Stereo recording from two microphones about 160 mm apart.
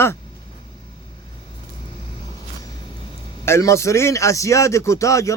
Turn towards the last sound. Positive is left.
turn(degrees=20)  # may be behind; listen again after turning